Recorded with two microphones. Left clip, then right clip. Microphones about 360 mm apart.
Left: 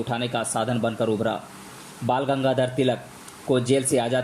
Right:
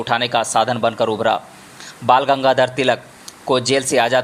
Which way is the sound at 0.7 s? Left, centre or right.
Right.